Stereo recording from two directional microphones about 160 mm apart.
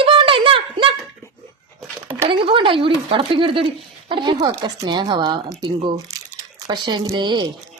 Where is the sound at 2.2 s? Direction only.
30° right (ahead or behind).